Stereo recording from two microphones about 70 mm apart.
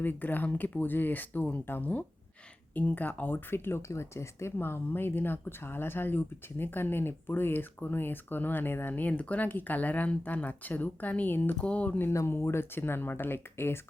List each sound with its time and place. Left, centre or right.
0.0 s speech: left
4.5 s speech: left
12.1 s speech: left